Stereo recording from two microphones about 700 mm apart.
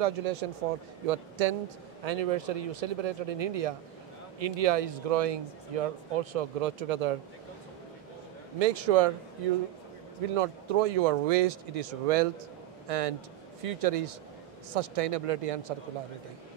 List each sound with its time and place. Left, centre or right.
0.0 s speech: right
8.5 s speech: right
10.3 s a man's voice: right